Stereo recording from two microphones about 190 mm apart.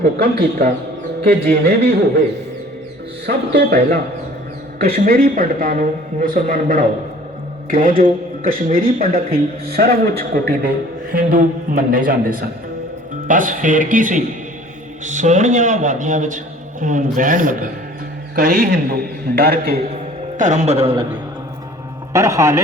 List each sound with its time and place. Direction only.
0.0 s speech: 55° right (ahead or behind)
3.2 s speech: 60° right (ahead or behind)
4.8 s speech: 50° right (ahead or behind)
11.1 s a man's voice: 45° right (ahead or behind)
20.4 s a man's voice: 40° right (ahead or behind)
22.1 s a man's voice: 15° right (ahead or behind)